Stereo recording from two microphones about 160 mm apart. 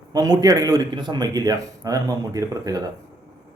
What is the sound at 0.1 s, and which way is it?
Speech, 25° right (ahead or behind).